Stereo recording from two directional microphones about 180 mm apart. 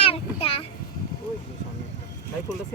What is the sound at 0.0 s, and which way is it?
Child singing, 30° left (ahead or behind).